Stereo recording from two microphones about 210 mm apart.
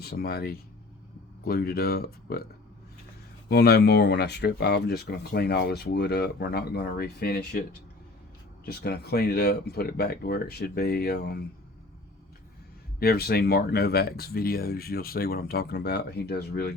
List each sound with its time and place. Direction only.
0.0 s speech: 50° left (ahead or behind)
3.5 s speech: 50° left (ahead or behind)
8.6 s speech: 50° left (ahead or behind)
13.0 s speech: 50° left (ahead or behind)